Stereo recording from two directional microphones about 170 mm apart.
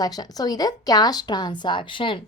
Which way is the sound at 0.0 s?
20° left (ahead or behind).